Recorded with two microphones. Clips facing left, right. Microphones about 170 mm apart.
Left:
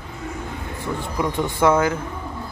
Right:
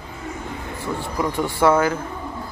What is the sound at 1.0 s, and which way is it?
Speech, 15° left (ahead or behind).